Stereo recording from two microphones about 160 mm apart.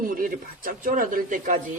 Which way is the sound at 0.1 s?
60° right (ahead or behind).